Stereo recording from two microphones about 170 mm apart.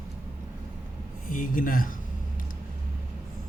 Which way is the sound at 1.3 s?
50° left (ahead or behind).